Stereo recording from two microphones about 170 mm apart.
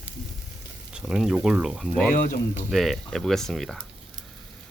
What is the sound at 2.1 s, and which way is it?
Speech, 55° left (ahead or behind).